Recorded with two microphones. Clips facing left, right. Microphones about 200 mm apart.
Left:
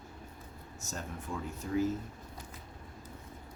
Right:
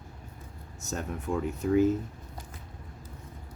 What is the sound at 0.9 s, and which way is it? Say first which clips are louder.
Speech: right 8 dB; 60° right (ahead or behind).